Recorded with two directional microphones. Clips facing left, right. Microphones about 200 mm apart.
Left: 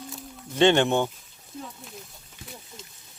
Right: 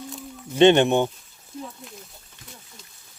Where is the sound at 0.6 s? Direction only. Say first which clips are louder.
Right 4 dB; 20° right (ahead or behind).